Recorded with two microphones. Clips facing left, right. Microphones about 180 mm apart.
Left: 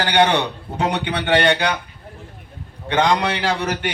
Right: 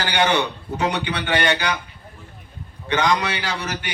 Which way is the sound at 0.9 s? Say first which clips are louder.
Left 4 dB; 55° left (ahead or behind).